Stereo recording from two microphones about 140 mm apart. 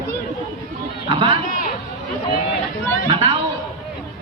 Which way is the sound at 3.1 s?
40° right (ahead or behind).